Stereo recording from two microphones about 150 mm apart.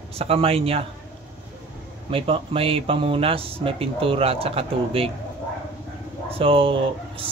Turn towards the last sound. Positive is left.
turn(degrees=-35)  # may be behind; listen again after turning